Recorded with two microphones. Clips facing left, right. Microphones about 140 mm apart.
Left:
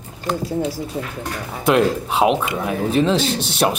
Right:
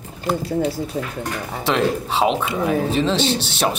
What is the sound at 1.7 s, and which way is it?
Speech, 5° left (ahead or behind).